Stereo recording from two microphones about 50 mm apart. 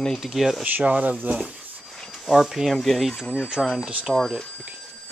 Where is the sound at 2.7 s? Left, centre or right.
Centre.